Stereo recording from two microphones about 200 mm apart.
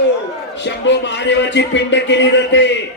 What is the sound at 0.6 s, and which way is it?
A man's voice, 60° left (ahead or behind).